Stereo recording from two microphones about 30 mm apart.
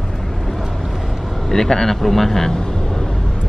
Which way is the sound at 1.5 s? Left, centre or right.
Centre.